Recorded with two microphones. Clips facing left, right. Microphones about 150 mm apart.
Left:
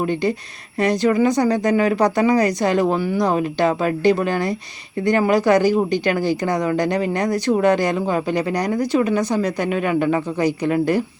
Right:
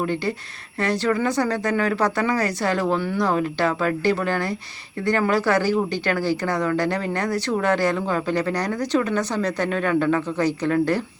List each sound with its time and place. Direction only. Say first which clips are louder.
0.0 s speech: left 4 dB; 15° left (ahead or behind)